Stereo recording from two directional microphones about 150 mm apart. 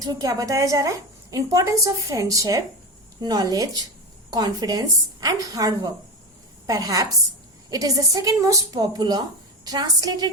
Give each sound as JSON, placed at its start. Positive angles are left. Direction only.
{"t": 0.0, "sound": "a woman's voice", "side_deg": -25}